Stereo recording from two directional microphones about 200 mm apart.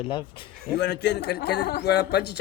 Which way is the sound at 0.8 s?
55° left (ahead or behind).